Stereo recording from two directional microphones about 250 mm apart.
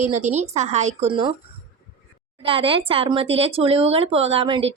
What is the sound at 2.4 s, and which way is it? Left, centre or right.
A woman's voice, right.